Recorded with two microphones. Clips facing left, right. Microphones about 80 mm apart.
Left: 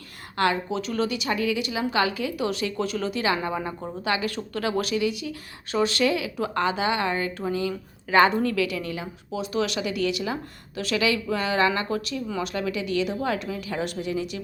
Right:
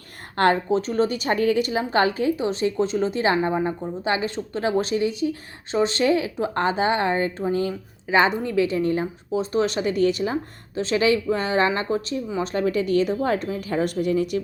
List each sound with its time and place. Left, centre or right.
0.3 s a woman's voice: right; by 8.5 s centre
8.5 s a woman's voice: right